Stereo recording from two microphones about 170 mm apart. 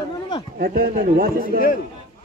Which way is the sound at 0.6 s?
60° right (ahead or behind).